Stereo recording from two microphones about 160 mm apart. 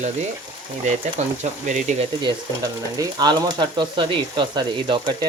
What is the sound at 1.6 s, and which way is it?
Speech, 50° right (ahead or behind).